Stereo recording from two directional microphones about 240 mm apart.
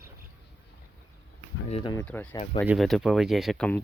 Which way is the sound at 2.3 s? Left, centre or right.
Left.